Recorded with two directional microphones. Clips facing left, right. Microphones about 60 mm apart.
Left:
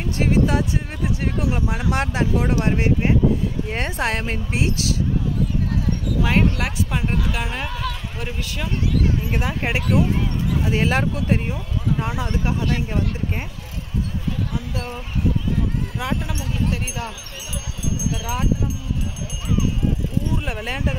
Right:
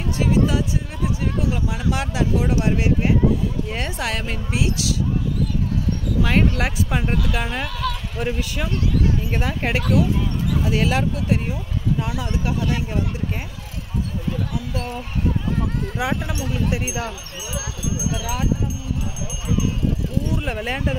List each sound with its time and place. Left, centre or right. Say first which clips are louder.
0.2 s speech: even; left
6.2 s speech: even; centre
7.8 s speech: right 6 dB; centre
8.2 s speech: right 6 dB; centre
9.3 s speech: even; centre
10.5 s speech: even; left
16.0 s speech: right 4 dB; centre
20.2 s speech: right 1 dB; centre